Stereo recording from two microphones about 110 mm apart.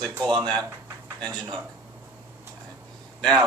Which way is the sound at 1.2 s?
5° left (ahead or behind).